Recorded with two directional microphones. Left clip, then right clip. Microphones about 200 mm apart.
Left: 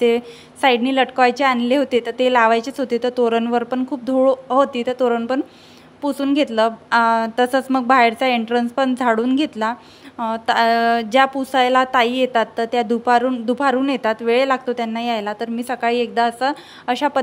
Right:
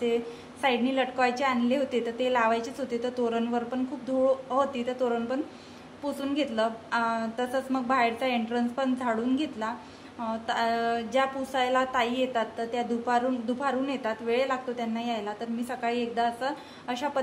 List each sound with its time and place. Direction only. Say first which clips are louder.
0.0 s a woman's voice: left 11 dB; 50° left (ahead or behind)